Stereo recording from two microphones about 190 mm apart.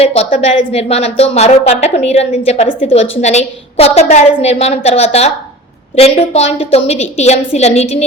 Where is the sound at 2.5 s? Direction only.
45° left (ahead or behind).